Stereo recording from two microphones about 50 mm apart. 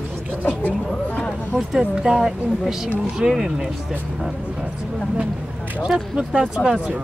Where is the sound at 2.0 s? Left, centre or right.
Centre.